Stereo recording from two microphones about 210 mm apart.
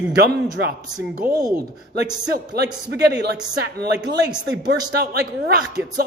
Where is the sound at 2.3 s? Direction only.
50° right (ahead or behind).